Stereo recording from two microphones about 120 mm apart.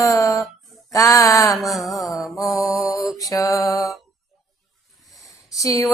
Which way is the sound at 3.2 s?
25° left (ahead or behind).